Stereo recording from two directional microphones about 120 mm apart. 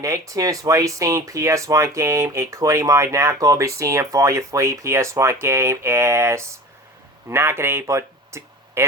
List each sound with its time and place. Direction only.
0.0 s speech: 25° right (ahead or behind)